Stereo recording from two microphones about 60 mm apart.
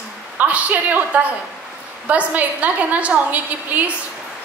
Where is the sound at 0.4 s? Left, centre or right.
Right.